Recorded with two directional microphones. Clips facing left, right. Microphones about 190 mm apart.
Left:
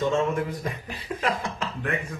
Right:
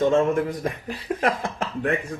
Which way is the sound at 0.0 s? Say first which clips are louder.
Right 5 dB; 55° right (ahead or behind).